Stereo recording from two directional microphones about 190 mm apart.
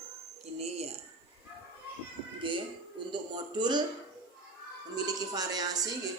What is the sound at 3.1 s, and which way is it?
Speech, 25° right (ahead or behind).